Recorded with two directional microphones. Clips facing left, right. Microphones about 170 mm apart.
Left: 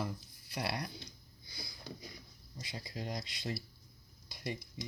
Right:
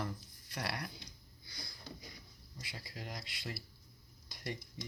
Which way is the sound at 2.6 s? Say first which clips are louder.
Left 5 dB; 20° left (ahead or behind).